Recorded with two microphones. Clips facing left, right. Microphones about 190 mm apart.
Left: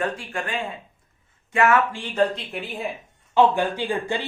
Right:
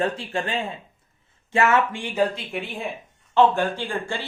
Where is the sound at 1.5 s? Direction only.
25° right (ahead or behind).